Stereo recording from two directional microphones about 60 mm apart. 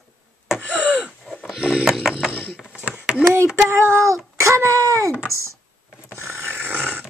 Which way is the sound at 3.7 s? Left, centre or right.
Right.